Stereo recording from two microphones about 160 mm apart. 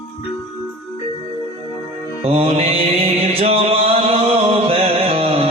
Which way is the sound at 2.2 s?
35° right (ahead or behind).